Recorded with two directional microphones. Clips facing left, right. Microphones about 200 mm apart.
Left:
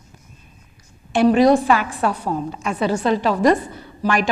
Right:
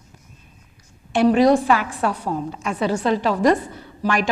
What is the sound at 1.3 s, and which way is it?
A woman's voice, 10° left (ahead or behind).